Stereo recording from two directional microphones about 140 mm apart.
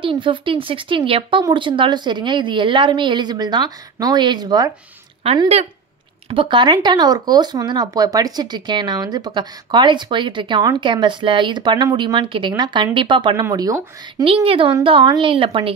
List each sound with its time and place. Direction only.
0.0 s speech: 35° right (ahead or behind)
6.2 s speech: 40° right (ahead or behind)
14.2 s speech: 40° right (ahead or behind)